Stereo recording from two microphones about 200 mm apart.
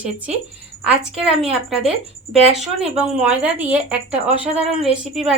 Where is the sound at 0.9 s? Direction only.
30° right (ahead or behind).